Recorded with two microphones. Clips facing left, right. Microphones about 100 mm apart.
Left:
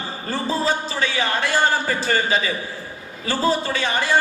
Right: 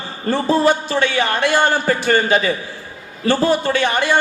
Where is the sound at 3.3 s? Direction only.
65° right (ahead or behind).